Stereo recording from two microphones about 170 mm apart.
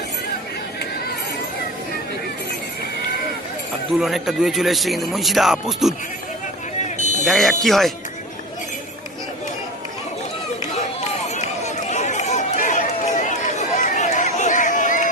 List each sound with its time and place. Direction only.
4.0 s a man's voice: centre (ahead or behind)
7.3 s a man's voice: centre (ahead or behind)
11.3 s run: 45° left (ahead or behind)